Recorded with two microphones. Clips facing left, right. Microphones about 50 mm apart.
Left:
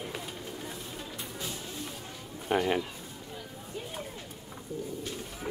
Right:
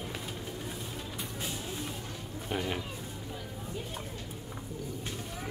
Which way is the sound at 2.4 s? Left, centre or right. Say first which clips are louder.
Left 7 dB; centre.